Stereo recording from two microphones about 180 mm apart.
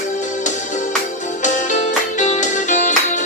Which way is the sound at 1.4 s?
45° left (ahead or behind).